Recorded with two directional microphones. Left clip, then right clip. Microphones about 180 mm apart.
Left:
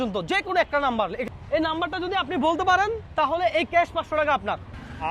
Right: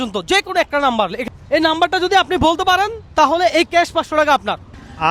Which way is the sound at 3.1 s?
40° right (ahead or behind).